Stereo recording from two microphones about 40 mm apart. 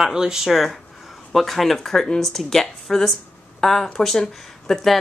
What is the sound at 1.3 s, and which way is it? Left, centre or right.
Speech, centre.